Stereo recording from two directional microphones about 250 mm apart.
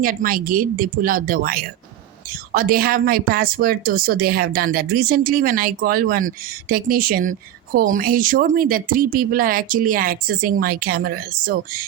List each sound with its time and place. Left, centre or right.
0.0 s a woman's voice: right